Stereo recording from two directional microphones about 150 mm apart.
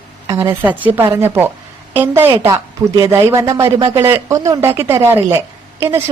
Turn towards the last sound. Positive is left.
turn(degrees=-15)  # may be behind; listen again after turning